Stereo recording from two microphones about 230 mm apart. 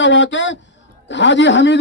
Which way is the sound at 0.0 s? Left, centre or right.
Left.